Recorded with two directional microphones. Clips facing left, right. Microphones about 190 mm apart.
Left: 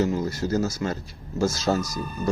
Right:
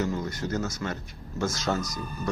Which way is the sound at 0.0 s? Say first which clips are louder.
Left 5 dB; 25° left (ahead or behind).